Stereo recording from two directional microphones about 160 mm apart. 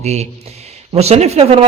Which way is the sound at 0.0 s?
45° right (ahead or behind).